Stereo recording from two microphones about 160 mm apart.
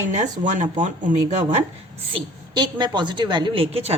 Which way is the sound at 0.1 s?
50° right (ahead or behind).